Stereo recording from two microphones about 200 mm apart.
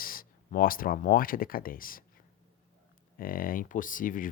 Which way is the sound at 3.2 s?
45° left (ahead or behind).